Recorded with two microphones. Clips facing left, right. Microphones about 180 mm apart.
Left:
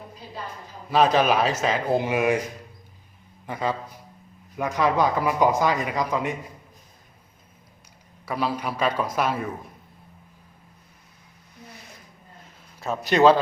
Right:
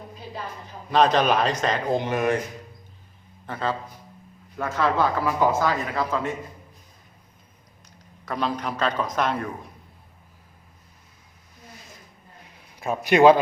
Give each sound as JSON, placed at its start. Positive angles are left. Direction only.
{"t": 0.9, "sound": "speech", "side_deg": 5}
{"t": 3.4, "sound": "a man's voice", "side_deg": 15}
{"t": 8.2, "sound": "speech", "side_deg": 10}
{"t": 12.8, "sound": "a man's voice", "side_deg": -15}